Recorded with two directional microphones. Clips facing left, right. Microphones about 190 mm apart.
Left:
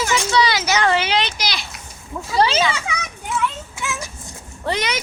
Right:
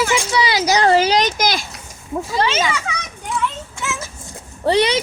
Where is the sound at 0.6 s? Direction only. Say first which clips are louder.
Right 5 dB; 35° right (ahead or behind).